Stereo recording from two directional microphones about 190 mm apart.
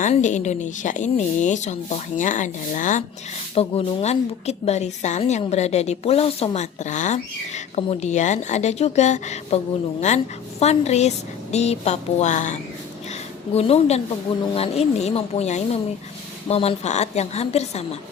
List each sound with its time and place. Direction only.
0.0 s a woman's voice: 40° left (ahead or behind)
3.5 s a woman's voice: 30° left (ahead or behind)
10.6 s a woman's voice: 35° left (ahead or behind)